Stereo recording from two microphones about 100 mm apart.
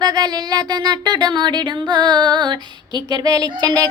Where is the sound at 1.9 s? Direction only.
45° right (ahead or behind).